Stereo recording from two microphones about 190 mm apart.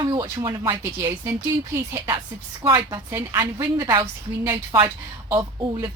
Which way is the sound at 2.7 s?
15° right (ahead or behind).